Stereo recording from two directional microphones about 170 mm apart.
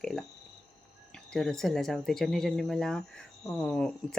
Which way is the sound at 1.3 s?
5° left (ahead or behind).